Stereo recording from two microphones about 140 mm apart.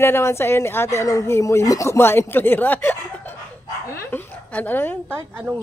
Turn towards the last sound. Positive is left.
turn(degrees=-15)  # may be behind; listen again after turning